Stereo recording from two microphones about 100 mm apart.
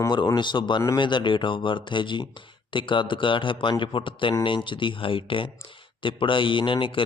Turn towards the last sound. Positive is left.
turn(degrees=60)  # may be behind; listen again after turning